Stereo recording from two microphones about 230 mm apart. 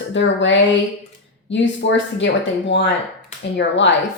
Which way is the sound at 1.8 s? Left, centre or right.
Left.